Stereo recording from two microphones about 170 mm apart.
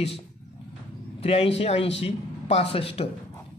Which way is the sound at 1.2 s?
35° left (ahead or behind).